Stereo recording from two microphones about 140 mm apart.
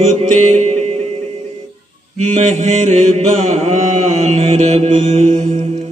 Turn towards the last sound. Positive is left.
turn(degrees=-55)  # may be behind; listen again after turning